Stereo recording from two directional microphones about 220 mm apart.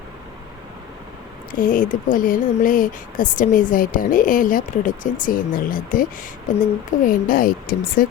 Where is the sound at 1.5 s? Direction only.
35° left (ahead or behind).